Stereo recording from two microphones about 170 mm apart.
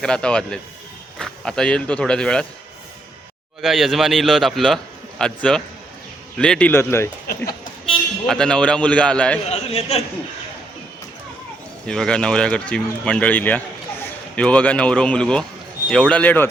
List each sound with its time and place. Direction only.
0.0 s a man's voice: 5° left (ahead or behind)
3.6 s a man's voice: centre (ahead or behind)
7.9 s speech: 5° left (ahead or behind)
9.5 s a man's voice: 35° left (ahead or behind)
11.9 s speech: 5° left (ahead or behind)